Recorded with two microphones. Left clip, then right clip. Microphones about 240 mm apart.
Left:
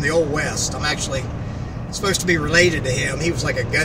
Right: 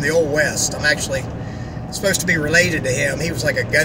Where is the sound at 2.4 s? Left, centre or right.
Centre.